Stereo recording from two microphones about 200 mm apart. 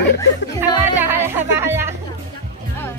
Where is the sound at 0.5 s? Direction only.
10° right (ahead or behind).